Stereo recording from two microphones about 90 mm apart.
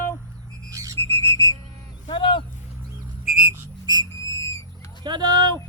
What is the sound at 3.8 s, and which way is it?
Whistle, 50° right (ahead or behind).